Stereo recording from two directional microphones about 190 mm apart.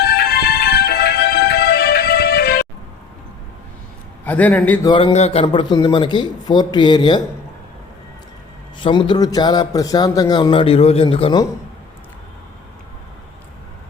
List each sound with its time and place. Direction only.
0.0 s music: 55° left (ahead or behind)
4.3 s a man's voice: 10° left (ahead or behind)
4.9 s a man's voice: 20° left (ahead or behind)
5.1 s a man's voice: 30° left (ahead or behind)
8.8 s a man's voice: 25° left (ahead or behind)